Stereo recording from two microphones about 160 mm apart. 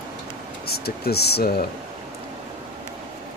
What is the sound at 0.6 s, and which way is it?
Speech, 75° left (ahead or behind).